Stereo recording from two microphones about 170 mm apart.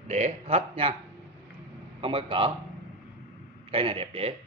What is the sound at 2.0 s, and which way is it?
Speech, 30° right (ahead or behind).